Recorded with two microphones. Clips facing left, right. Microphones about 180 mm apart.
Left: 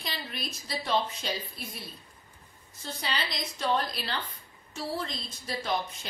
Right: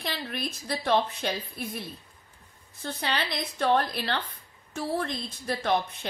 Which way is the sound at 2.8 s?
65° right (ahead or behind).